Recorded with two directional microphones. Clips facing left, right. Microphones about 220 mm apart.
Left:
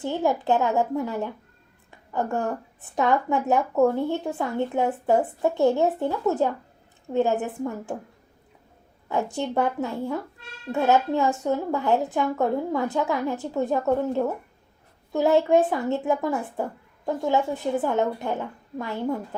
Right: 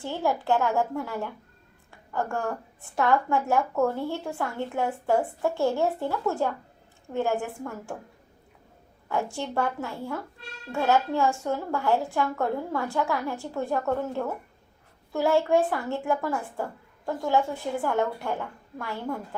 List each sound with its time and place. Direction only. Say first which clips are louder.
0.0 s a woman's voice: left 4 dB; 20° left (ahead or behind)
9.0 s a woman's voice: left 3 dB; 20° left (ahead or behind)